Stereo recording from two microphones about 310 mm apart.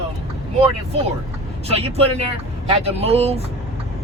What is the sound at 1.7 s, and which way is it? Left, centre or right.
Speech, centre.